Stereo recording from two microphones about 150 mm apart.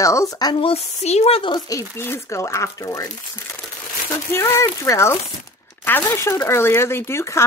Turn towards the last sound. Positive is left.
turn(degrees=20)  # may be behind; listen again after turning